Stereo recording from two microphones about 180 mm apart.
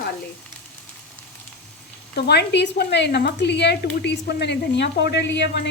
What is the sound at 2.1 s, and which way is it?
A woman's voice, 65° left (ahead or behind).